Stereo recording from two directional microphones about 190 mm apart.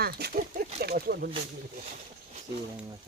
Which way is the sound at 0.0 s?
55° right (ahead or behind).